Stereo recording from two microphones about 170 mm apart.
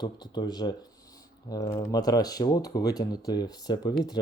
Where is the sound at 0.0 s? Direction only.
25° left (ahead or behind).